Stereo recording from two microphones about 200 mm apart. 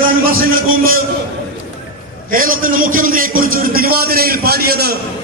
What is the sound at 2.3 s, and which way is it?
A man's voice, 45° right (ahead or behind).